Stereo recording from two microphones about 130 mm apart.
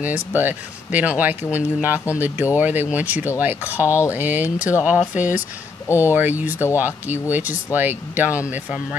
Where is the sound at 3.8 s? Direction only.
20° left (ahead or behind).